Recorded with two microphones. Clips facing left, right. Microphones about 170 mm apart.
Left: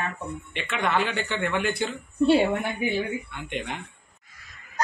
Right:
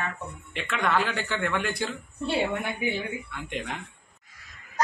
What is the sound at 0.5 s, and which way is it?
A man's voice, centre (ahead or behind).